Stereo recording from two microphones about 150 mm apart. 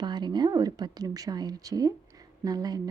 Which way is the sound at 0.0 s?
30° right (ahead or behind).